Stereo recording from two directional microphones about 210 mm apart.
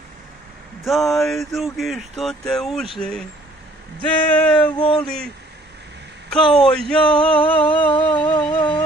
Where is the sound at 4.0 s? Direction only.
10° left (ahead or behind).